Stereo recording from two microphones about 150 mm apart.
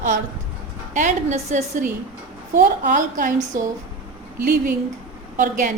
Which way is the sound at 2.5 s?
65° right (ahead or behind).